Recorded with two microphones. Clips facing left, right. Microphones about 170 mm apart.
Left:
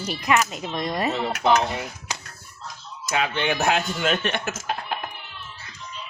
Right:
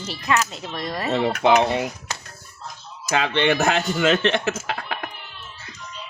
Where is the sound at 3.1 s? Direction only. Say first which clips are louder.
Right 4 dB; 80° right.